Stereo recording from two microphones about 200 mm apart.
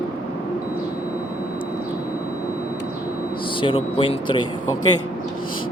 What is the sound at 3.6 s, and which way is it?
Speech, 25° left (ahead or behind).